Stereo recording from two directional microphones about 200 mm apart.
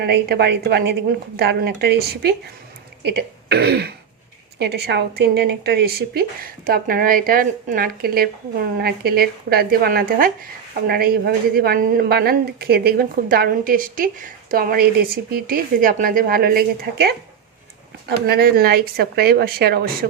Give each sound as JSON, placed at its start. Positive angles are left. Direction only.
{"t": 0.0, "sound": "a woman's voice", "side_deg": -55}
{"t": 18.3, "sound": "speech", "side_deg": -50}